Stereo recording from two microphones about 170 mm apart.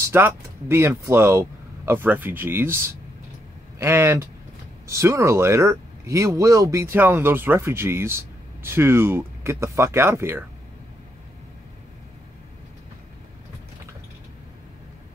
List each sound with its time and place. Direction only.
0.1 s speech: 15° right (ahead or behind)